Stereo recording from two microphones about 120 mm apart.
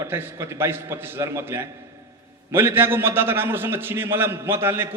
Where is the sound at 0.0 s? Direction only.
20° right (ahead or behind).